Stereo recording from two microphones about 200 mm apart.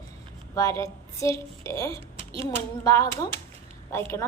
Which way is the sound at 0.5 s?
15° left (ahead or behind).